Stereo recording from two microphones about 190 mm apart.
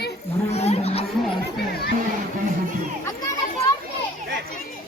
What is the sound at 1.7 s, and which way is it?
Speech, 55° left (ahead or behind).